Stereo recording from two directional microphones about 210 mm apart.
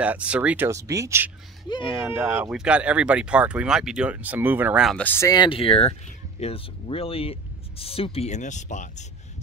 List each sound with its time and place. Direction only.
0.0 s speech: 5° right (ahead or behind); by 8.8 s 35° left (ahead or behind)